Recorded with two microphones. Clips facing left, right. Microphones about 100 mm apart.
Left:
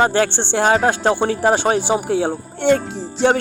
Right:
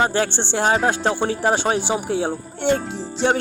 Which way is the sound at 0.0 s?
60° left (ahead or behind).